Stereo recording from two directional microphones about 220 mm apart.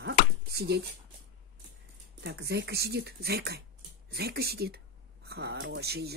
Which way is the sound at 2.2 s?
50° right (ahead or behind).